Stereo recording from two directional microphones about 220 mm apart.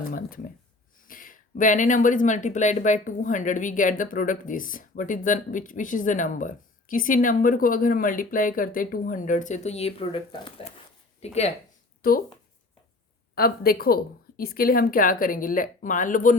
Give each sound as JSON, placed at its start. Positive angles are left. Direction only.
{"t": 0.1, "sound": "speech", "side_deg": 40}
{"t": 12.0, "sound": "speech", "side_deg": 40}
{"t": 13.3, "sound": "speech", "side_deg": 40}